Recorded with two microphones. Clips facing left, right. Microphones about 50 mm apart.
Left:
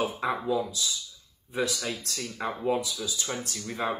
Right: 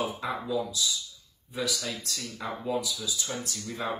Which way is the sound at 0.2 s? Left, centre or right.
Left.